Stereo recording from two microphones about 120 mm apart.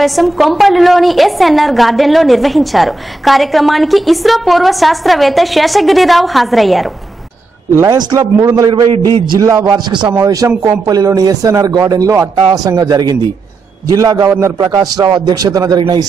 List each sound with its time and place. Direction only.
0.0 s a woman's voice: centre (ahead or behind)
7.7 s speech: 25° right (ahead or behind)
8.6 s a man's voice: 40° right (ahead or behind)